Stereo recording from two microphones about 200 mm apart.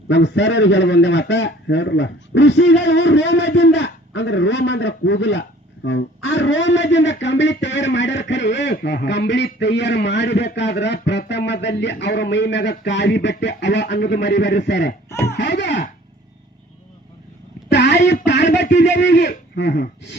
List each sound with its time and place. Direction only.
0.1 s a man's voice: 60° left (ahead or behind)
17.7 s a sound: 60° left (ahead or behind)
18.3 s a man's voice: 60° left (ahead or behind)